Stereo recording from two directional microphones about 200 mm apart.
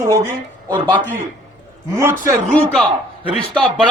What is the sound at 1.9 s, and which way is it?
Speech, 15° right (ahead or behind).